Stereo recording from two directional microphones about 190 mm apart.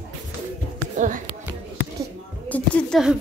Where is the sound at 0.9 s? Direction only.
40° right (ahead or behind).